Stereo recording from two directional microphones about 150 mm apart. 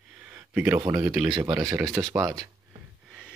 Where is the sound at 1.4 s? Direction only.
20° right (ahead or behind).